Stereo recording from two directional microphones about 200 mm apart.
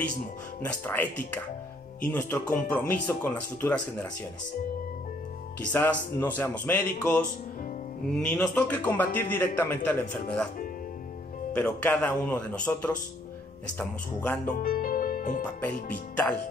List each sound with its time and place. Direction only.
0.6 s a man's voice: 10° left (ahead or behind)
5.7 s a man's voice: 10° left (ahead or behind)
11.5 s a man's voice: 10° left (ahead or behind)
14.6 s music: 45° left (ahead or behind)